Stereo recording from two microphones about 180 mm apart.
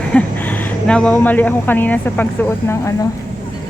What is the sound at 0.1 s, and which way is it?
Speech, 10° left (ahead or behind).